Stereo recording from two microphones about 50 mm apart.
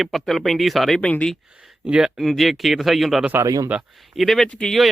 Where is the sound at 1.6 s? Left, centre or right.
Right.